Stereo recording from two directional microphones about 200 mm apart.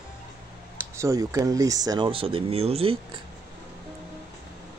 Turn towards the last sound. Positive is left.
turn(degrees=-25)  # may be behind; listen again after turning